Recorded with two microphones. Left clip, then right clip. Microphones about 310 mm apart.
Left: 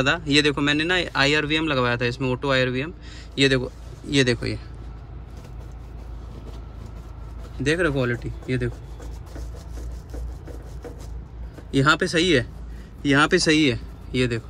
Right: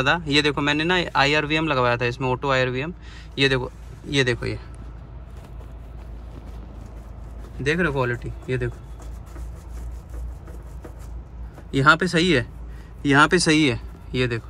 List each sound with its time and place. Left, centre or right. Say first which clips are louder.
0.0 s speech: even; centre
7.6 s speech: even; centre
11.7 s speech: right 2 dB; centre